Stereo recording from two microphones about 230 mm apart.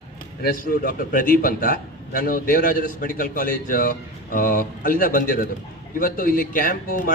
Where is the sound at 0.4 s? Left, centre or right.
Left.